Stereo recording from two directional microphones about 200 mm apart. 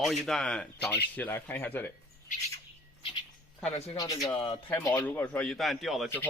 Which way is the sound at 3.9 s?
20° left (ahead or behind).